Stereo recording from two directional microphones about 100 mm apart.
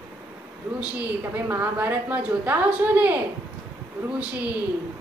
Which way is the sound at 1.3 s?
20° right (ahead or behind).